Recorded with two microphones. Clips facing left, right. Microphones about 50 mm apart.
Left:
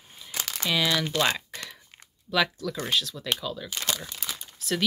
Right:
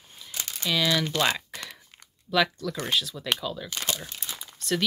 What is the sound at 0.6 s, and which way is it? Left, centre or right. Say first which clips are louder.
Speech: right 1 dB; centre.